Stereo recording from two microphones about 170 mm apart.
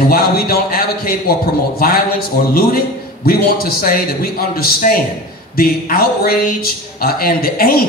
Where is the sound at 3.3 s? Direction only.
60° left (ahead or behind).